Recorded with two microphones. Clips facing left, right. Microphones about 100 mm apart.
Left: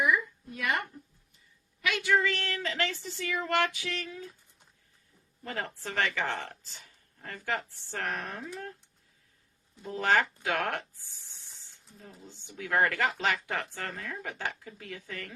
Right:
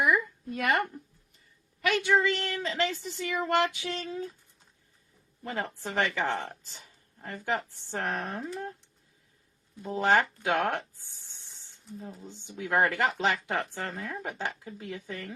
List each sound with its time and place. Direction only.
0.0 s a sound: 60° right (ahead or behind)
2.0 s speech: 20° right (ahead or behind)
5.4 s speech: 15° right (ahead or behind)
9.8 s speech: 20° right (ahead or behind)